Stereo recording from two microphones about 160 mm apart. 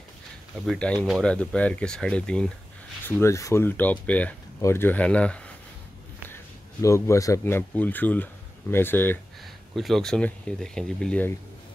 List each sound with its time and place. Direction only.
0.7 s speech: 5° left (ahead or behind)
3.1 s speech: 15° left (ahead or behind)
9.8 s speech: centre (ahead or behind)